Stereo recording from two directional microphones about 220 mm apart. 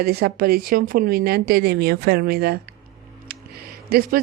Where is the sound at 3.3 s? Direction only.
45° right (ahead or behind).